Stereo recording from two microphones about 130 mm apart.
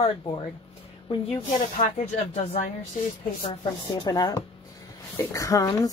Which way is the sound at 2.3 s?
50° left (ahead or behind).